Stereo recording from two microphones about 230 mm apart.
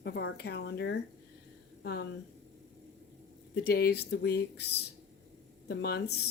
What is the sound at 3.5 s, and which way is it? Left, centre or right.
Speech, left.